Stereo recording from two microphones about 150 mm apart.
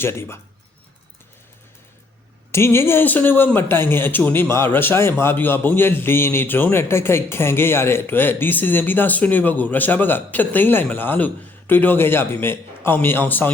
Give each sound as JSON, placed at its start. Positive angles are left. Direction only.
{"t": 0.0, "sound": "a man's voice", "side_deg": 15}
{"t": 2.5, "sound": "a man's voice", "side_deg": 15}